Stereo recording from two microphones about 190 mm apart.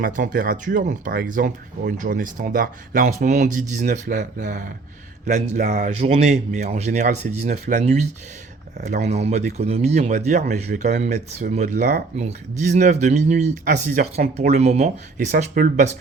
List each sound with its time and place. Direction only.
0.0 s speech: 50° right (ahead or behind)
12.1 s speech: 40° right (ahead or behind)